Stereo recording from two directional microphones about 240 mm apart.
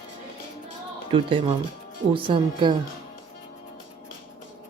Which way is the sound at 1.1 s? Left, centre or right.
Right.